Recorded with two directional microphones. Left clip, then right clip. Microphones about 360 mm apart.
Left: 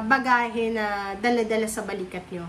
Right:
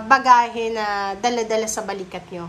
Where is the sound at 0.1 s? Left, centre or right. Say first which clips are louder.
Right 7 dB; centre.